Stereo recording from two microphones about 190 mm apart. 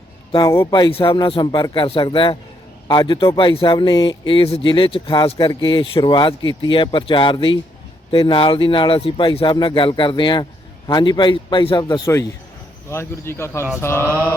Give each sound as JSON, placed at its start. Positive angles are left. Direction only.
{"t": 0.3, "sound": "speech", "side_deg": 20}
{"t": 14.1, "sound": "mantra", "side_deg": -15}